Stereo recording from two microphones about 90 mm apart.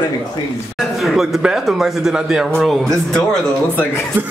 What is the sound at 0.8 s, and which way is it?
Speech, centre (ahead or behind).